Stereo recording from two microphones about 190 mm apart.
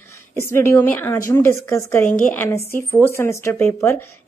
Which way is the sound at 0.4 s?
15° left (ahead or behind).